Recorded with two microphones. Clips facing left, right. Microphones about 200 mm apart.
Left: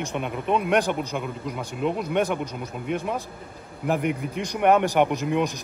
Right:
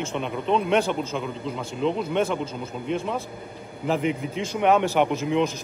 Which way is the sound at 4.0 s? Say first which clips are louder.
Right 1 dB; 55° left (ahead or behind).